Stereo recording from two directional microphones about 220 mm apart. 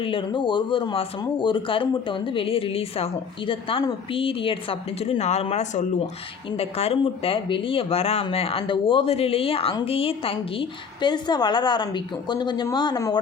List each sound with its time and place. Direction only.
0.0 s speech: 25° left (ahead or behind)